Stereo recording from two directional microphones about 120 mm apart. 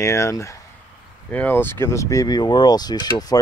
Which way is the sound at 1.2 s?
15° left (ahead or behind).